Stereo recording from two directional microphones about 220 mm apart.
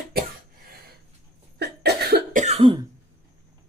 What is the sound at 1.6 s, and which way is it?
Cough, 45° right (ahead or behind).